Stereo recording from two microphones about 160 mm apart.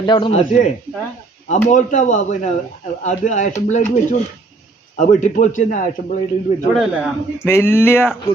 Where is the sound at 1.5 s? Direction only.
50° left (ahead or behind).